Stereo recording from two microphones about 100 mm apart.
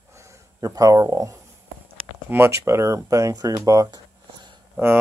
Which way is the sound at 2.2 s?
25° right (ahead or behind).